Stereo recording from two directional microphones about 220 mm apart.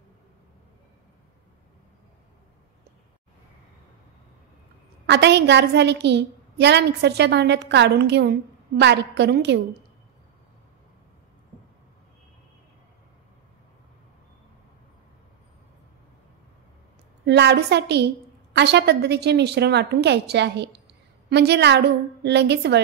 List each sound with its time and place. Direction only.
5.0 s a woman's voice: 50° right (ahead or behind)
17.3 s a woman's voice: 50° right (ahead or behind)